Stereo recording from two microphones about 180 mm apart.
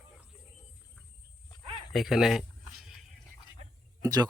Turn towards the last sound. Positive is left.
turn(degrees=-20)  # may be behind; listen again after turning